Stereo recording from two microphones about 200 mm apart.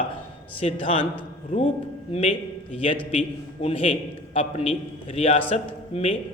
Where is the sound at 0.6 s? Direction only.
25° left (ahead or behind).